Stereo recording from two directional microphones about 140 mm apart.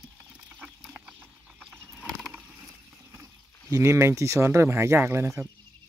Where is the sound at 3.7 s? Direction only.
20° right (ahead or behind).